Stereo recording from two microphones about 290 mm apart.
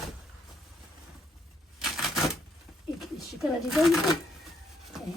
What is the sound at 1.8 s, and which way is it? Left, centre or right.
Typewriter, centre.